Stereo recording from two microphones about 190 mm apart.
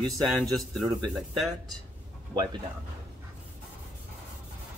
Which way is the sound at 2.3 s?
20° right (ahead or behind).